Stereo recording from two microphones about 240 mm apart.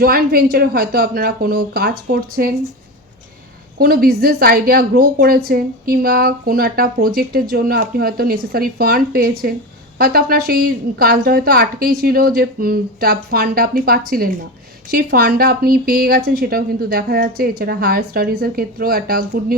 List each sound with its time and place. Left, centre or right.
0.0 s a woman's voice: right
3.8 s a woman's voice: right